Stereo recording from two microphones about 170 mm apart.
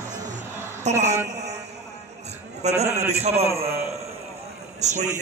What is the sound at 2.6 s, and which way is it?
Speech, 40° right (ahead or behind).